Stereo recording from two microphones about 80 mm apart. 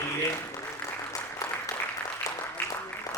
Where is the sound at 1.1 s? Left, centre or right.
Left.